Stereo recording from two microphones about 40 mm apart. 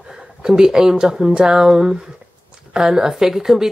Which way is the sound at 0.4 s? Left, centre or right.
Centre.